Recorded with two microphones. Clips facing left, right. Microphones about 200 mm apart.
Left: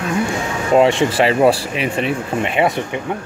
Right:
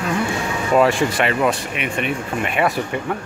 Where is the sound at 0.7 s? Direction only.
25° left (ahead or behind).